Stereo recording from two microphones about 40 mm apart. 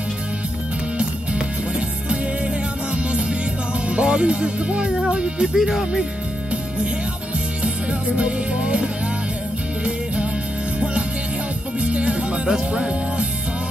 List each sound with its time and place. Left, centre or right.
2.0 s music: right
3.9 s speech: right
5.5 s speech: centre
8.2 s music: right
11.8 s music: right
12.4 s speech: centre